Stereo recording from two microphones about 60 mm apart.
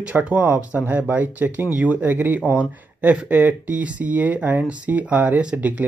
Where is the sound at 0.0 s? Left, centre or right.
Right.